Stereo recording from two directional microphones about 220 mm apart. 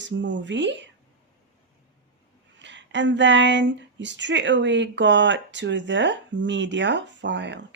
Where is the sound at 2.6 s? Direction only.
55° right (ahead or behind).